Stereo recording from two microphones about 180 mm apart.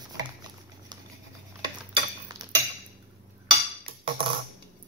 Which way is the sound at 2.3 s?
20° right (ahead or behind).